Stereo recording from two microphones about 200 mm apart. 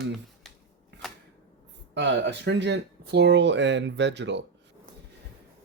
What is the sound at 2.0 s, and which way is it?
Speech, 60° right (ahead or behind).